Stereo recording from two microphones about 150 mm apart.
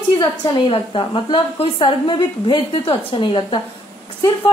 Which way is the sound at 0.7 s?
35° left (ahead or behind).